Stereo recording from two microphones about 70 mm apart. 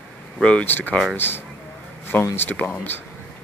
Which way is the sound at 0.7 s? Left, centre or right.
Left.